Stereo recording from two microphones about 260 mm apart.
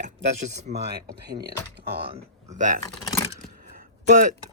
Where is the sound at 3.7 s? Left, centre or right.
Right.